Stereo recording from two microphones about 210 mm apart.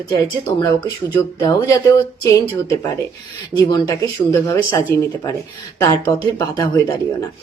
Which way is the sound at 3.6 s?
20° left (ahead or behind).